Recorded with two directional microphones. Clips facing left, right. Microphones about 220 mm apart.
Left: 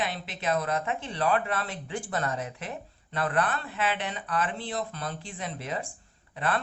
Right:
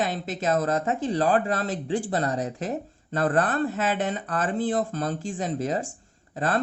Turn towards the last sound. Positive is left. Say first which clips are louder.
# right 4 dB
turn(degrees=-40)  # may be behind; listen again after turning